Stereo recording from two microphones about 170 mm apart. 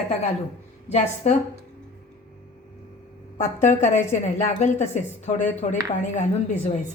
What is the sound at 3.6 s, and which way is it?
A woman's voice, 45° left (ahead or behind).